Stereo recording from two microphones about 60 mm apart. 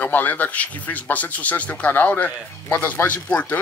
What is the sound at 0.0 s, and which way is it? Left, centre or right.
Speech, left.